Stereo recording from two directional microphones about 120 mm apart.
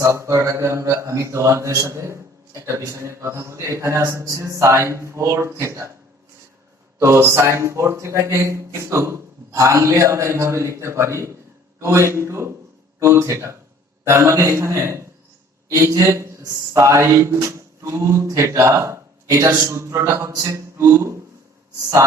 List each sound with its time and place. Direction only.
0.0 s speech: 25° right (ahead or behind)
7.0 s speech: 20° right (ahead or behind)